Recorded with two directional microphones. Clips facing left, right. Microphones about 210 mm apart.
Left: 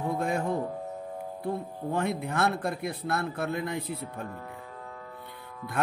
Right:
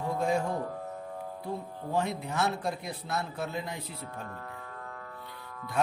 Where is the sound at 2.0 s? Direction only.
55° left (ahead or behind).